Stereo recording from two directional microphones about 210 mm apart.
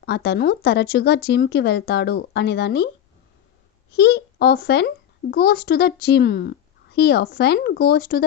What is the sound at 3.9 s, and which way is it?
Speech, 50° left (ahead or behind).